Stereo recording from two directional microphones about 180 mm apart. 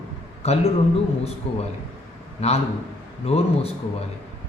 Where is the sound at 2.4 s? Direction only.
35° left (ahead or behind).